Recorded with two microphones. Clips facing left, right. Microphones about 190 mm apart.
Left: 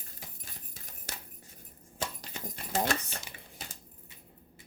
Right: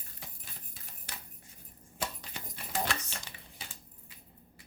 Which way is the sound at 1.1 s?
45° left (ahead or behind).